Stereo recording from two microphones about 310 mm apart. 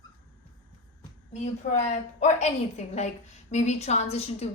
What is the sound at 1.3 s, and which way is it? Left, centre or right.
A woman's voice, left.